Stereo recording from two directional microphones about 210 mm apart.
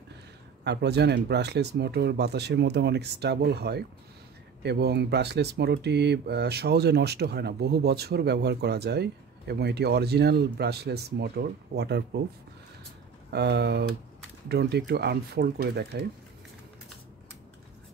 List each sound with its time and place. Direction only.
0.7 s speech: 50° right (ahead or behind)
13.3 s speech: 50° right (ahead or behind)